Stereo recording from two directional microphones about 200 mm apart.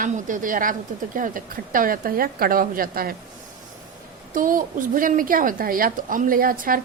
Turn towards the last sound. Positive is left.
turn(degrees=-45)  # may be behind; listen again after turning